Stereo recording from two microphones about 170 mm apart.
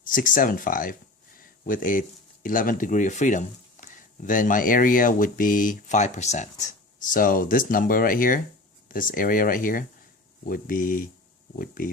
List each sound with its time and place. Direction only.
0.0 s speech: 55° left (ahead or behind)
7.1 s speech: 55° left (ahead or behind)